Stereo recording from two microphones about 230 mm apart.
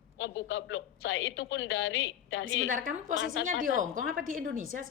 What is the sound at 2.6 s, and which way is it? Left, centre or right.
Speech, right.